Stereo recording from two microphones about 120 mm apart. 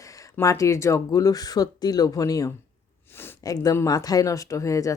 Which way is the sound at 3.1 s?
20° left (ahead or behind).